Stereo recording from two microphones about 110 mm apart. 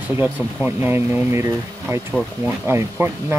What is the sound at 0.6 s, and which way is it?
Speech, 20° right (ahead or behind).